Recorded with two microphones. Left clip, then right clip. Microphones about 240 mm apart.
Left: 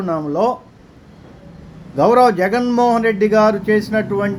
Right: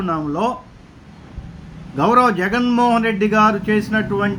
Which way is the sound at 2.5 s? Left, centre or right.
Right.